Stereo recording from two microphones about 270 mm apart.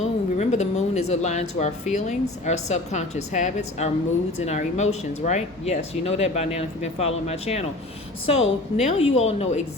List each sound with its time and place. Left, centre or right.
0.0 s speech: left